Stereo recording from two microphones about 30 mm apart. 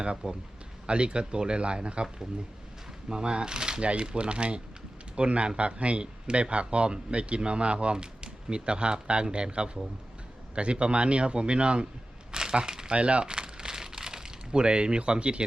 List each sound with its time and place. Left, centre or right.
0.2 s speech: right
0.9 s speech: right
3.1 s speech: right
12.3 s a sound: right
12.9 s crumpling: right